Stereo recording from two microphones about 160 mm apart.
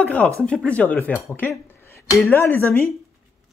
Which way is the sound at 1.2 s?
15° left (ahead or behind).